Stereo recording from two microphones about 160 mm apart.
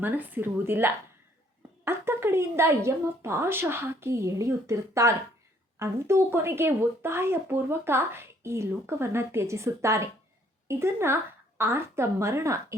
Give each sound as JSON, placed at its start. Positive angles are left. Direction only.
{"t": 0.0, "sound": "speech", "side_deg": -10}